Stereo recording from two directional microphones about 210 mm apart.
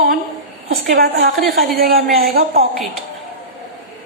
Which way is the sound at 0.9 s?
45° right (ahead or behind).